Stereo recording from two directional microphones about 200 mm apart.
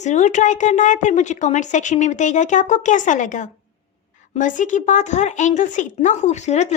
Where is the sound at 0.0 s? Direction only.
35° left (ahead or behind).